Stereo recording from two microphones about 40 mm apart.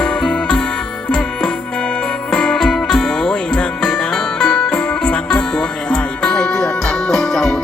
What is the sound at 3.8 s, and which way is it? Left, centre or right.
Music, centre.